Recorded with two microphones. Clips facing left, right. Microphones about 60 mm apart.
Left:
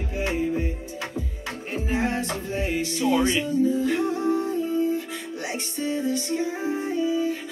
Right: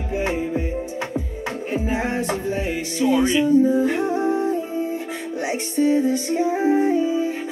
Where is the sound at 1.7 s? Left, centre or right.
Centre.